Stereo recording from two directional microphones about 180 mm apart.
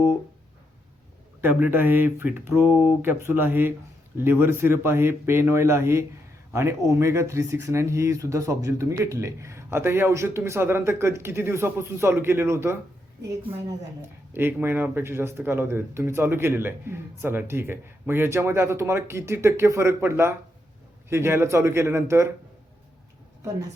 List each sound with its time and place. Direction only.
1.4 s speech: 10° right (ahead or behind)
14.3 s speech: 10° right (ahead or behind)